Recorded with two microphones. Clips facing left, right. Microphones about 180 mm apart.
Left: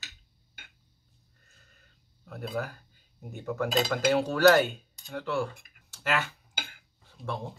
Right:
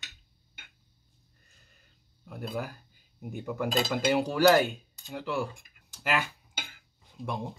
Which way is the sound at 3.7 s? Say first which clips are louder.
Left 1 dB; centre (ahead or behind).